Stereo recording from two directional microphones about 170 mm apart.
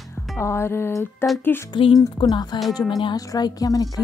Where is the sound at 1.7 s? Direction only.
30° left (ahead or behind).